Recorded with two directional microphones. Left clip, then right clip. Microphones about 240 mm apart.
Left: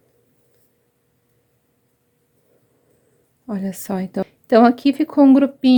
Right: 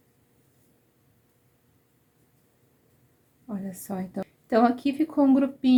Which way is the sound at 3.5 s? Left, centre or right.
Left.